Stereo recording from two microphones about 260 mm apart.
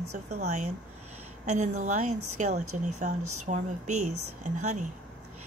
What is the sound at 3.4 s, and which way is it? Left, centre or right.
Speech, right.